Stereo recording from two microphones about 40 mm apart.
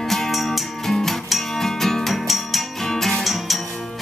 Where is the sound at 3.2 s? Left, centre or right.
Centre.